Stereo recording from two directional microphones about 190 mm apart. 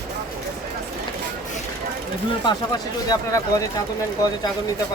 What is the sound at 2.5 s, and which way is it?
Speech, 20° left (ahead or behind).